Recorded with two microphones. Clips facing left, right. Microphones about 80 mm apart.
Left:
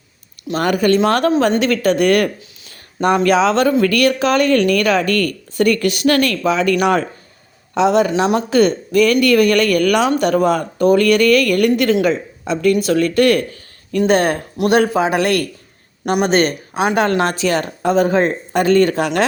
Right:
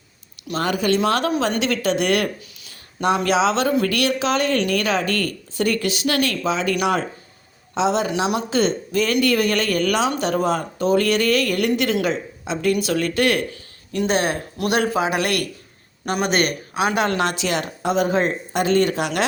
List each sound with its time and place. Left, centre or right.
0.6 s a woman's voice: left